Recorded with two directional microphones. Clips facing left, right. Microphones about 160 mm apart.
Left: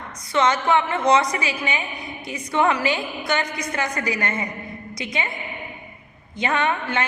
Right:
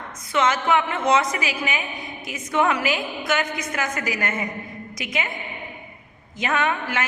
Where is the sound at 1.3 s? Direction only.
90° right.